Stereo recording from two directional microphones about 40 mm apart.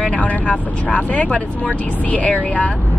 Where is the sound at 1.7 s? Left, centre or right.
Left.